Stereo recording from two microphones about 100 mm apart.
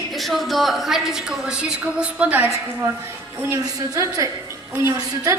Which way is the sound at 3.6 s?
35° right (ahead or behind).